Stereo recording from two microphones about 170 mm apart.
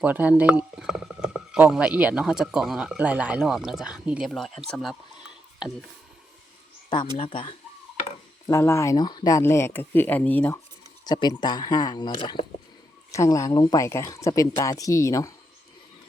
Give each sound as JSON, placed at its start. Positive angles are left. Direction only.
{"t": 0.0, "sound": "speech", "side_deg": -10}
{"t": 7.2, "sound": "speech", "side_deg": 30}
{"t": 8.4, "sound": "speech", "side_deg": 15}
{"t": 11.0, "sound": "speech", "side_deg": 25}